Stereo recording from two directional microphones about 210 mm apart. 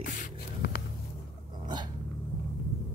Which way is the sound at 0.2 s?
50° left (ahead or behind).